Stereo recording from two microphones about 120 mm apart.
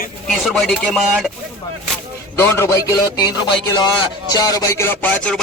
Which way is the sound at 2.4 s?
20° left (ahead or behind).